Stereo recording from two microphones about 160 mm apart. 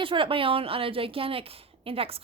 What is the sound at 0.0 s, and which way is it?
A woman's voice, 35° right (ahead or behind).